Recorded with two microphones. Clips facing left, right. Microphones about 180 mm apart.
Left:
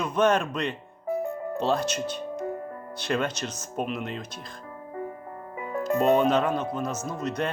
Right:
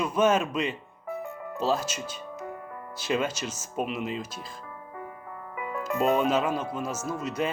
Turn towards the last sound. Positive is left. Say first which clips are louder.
# even
turn(degrees=-5)  # may be behind; listen again after turning